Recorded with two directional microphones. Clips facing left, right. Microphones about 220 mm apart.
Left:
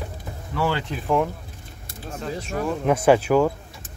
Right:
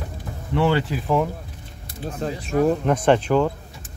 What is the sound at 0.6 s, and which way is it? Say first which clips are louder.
Speech: right 2 dB; 5° right (ahead or behind).